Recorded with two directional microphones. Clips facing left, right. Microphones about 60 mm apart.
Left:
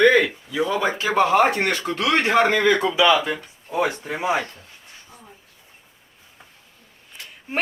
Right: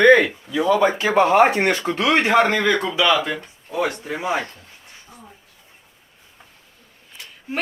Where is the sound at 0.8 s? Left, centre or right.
Right.